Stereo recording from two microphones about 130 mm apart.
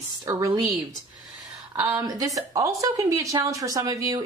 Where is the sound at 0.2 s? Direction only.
25° right (ahead or behind).